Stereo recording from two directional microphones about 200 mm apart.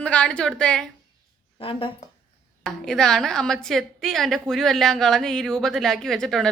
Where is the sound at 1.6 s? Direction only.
25° left (ahead or behind).